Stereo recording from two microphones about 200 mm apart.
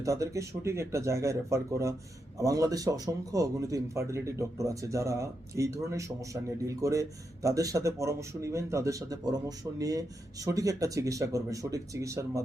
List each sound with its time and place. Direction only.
0.0 s a man's voice: 15° right (ahead or behind)